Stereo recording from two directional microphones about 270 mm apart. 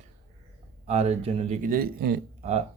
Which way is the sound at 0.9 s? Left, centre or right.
Right.